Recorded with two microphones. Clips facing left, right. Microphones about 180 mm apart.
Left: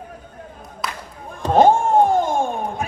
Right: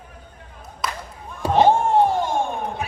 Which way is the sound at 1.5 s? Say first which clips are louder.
Left 2 dB; 45° left (ahead or behind).